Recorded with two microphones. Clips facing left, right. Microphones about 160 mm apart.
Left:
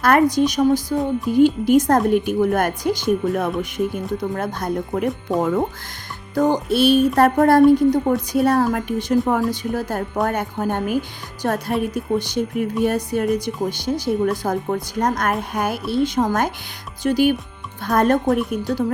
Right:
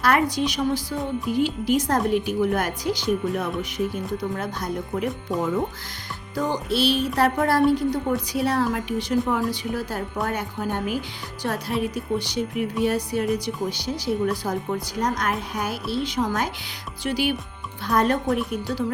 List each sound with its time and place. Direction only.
0.0 s speech: 50° left (ahead or behind)